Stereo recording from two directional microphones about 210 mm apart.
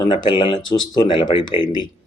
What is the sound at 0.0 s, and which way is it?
Speech, 20° left (ahead or behind).